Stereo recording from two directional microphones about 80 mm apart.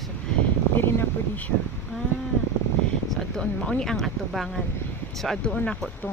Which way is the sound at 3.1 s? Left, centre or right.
Centre.